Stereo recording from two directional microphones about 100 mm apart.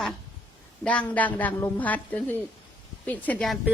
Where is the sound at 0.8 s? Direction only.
15° left (ahead or behind).